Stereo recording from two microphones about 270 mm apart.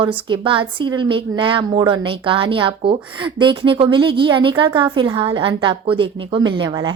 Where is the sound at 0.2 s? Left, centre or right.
Centre.